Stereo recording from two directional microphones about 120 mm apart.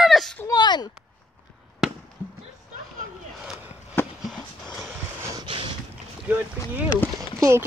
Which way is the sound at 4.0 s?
20° left (ahead or behind).